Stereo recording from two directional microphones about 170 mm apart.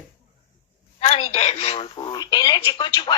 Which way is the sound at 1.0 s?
40° left (ahead or behind).